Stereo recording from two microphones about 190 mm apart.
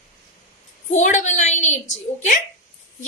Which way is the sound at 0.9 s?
40° left (ahead or behind).